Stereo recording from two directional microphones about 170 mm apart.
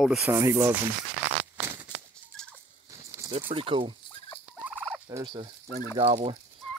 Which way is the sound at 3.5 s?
30° right (ahead or behind).